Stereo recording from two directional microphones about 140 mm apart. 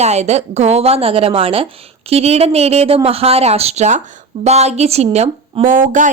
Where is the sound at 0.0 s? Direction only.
50° right (ahead or behind).